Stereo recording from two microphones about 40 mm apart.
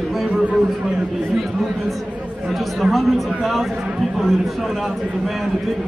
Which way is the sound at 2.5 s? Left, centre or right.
Centre.